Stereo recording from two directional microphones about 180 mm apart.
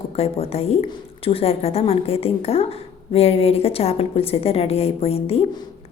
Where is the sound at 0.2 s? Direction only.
35° left (ahead or behind).